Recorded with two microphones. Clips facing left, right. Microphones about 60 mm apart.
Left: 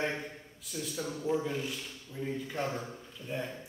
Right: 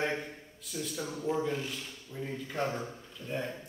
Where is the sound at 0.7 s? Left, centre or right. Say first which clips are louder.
Even; centre.